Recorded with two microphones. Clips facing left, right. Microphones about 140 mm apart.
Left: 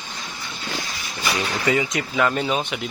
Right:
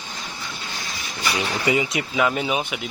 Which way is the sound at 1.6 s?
15° right (ahead or behind).